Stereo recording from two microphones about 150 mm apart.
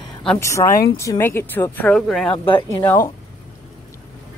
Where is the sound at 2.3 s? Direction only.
35° left (ahead or behind).